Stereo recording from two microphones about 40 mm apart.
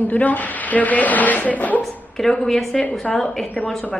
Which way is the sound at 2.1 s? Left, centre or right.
Centre.